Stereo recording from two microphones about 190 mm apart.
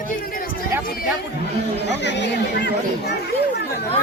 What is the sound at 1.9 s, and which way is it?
Chatter, 65° left (ahead or behind).